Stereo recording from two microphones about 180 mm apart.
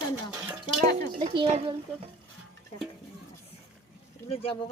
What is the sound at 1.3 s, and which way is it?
Speech, 30° right (ahead or behind).